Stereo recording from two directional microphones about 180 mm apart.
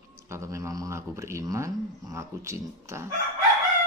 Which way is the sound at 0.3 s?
15° right (ahead or behind).